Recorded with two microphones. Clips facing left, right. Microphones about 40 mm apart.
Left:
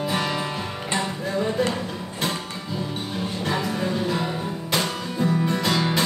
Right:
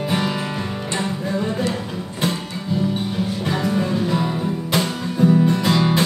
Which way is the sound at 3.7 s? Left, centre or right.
Centre.